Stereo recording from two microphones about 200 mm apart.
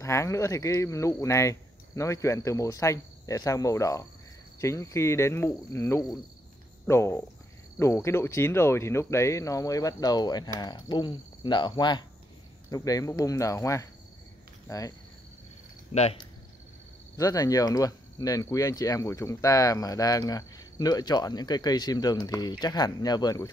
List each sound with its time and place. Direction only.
0.0 s speech: 15° left (ahead or behind)
15.9 s speech: 30° left (ahead or behind)
17.2 s speech: 15° left (ahead or behind)